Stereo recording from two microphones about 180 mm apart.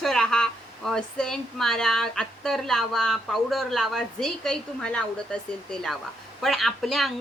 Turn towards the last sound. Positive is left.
turn(degrees=0)  # may be behind; listen again after turning